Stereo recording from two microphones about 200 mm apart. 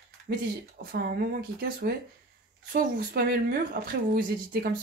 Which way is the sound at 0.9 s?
50° right (ahead or behind).